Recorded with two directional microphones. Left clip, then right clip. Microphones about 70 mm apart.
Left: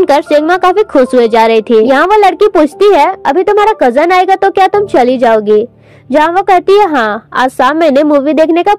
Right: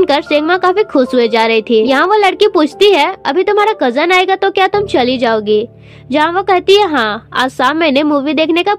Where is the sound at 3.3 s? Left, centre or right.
Left.